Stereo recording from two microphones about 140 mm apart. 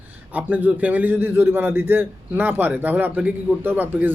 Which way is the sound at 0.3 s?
10° right (ahead or behind).